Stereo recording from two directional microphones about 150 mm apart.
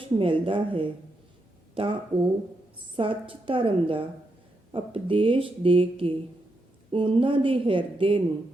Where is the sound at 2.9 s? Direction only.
35° right (ahead or behind).